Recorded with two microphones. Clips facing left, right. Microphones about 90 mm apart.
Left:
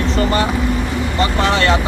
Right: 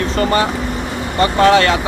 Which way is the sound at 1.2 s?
50° right (ahead or behind).